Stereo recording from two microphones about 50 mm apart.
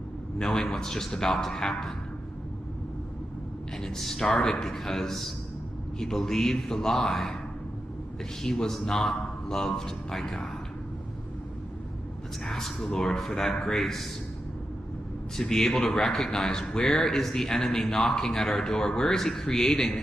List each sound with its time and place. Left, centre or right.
0.4 s speech: centre
3.8 s speech: centre
8.4 s speech: centre
12.4 s speech: centre
15.3 s speech: centre